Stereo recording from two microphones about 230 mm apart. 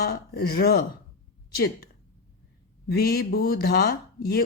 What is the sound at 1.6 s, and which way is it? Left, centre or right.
Speech, left.